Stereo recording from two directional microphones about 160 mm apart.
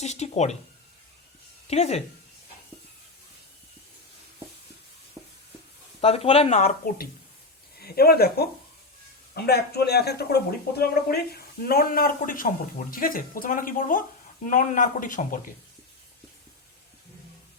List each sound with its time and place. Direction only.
0.0 s speech: 45° left (ahead or behind)
1.6 s speech: 45° left (ahead or behind)
6.0 s speech: 40° left (ahead or behind)
7.8 s speech: 75° left (ahead or behind); by 15.4 s 55° left (ahead or behind)